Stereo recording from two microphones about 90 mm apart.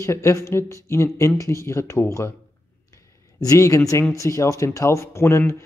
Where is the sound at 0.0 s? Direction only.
30° left (ahead or behind).